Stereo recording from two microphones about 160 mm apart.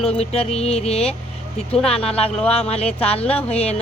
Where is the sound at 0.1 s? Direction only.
40° left (ahead or behind).